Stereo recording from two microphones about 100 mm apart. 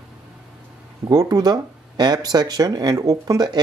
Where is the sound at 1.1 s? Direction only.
40° right (ahead or behind).